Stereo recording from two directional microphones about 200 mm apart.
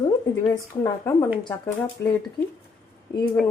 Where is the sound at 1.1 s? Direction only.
15° left (ahead or behind).